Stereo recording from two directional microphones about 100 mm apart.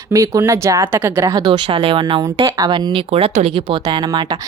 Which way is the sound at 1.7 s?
65° right (ahead or behind).